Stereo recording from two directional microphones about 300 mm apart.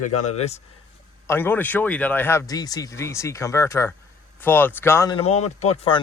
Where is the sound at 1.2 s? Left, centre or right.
Centre.